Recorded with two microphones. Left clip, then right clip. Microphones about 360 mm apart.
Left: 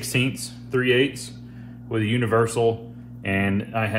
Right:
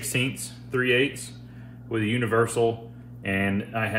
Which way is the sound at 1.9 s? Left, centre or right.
Centre.